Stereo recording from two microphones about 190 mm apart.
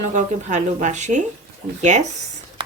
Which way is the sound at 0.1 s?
40° right (ahead or behind).